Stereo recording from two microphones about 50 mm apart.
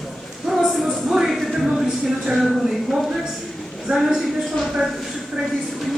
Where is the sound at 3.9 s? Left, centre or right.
Centre.